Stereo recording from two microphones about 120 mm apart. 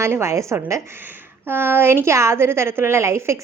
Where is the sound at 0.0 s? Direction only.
25° right (ahead or behind).